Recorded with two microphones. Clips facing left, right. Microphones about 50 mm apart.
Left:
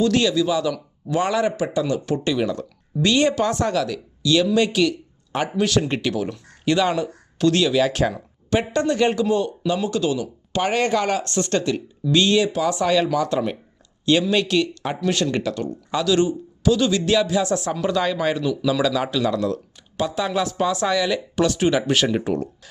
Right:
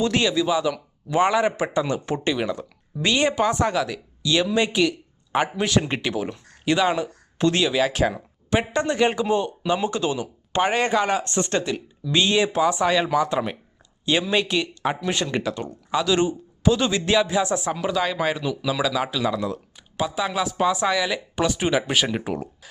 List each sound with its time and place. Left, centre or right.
0.0 s speech: right
17.7 s speech: centre